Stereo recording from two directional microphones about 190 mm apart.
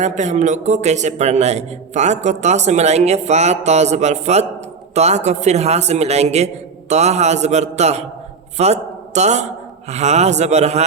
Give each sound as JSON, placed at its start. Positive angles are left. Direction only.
{"t": 0.0, "sound": "a man's voice", "side_deg": -40}